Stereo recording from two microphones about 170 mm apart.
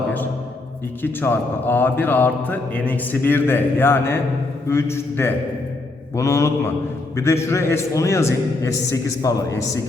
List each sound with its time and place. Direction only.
1.0 s speech: 10° left (ahead or behind)